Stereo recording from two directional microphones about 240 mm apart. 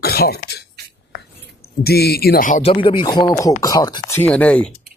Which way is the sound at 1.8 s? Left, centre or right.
Left.